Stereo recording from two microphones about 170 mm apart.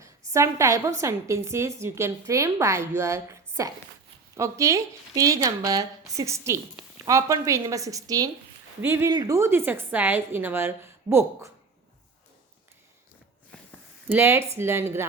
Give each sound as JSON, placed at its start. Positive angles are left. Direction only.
{"t": 0.0, "sound": "a woman's voice", "side_deg": -20}
{"t": 14.1, "sound": "a woman's voice", "side_deg": -15}